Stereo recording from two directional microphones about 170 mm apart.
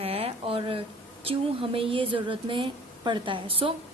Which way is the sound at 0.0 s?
35° right (ahead or behind).